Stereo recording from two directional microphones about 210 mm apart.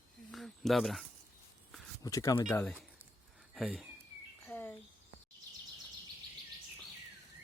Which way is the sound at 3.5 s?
5° right (ahead or behind).